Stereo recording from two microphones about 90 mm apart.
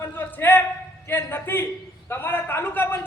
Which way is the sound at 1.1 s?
25° left (ahead or behind).